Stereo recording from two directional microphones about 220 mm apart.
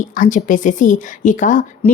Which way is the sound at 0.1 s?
35° left (ahead or behind).